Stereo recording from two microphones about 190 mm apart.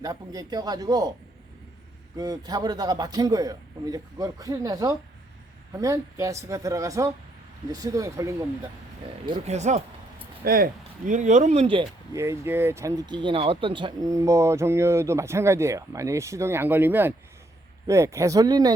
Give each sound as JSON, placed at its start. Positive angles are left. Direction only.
{"t": 0.0, "sound": "a man's voice", "side_deg": -20}
{"t": 2.1, "sound": "a man's voice", "side_deg": -20}
{"t": 9.6, "sound": "speech", "side_deg": -35}
{"t": 10.4, "sound": "speech", "side_deg": -50}
{"t": 12.1, "sound": "speech", "side_deg": -15}